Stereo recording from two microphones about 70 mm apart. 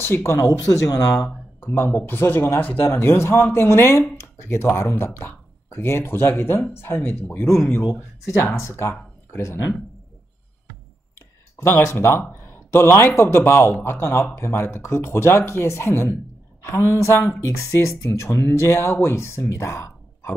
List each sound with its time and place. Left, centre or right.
0.0 s speech: left
0.8 s speech: left
1.7 s speech: left
11.5 s speech: left